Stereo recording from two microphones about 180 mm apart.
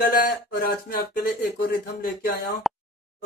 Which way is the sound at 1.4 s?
65° left (ahead or behind).